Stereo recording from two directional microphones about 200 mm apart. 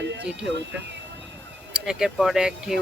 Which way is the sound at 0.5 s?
60° right (ahead or behind).